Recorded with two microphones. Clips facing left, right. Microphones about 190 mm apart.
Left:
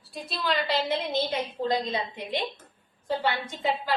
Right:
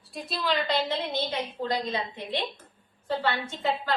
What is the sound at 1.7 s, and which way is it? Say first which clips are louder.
Speech: left 3 dB; 25° left (ahead or behind).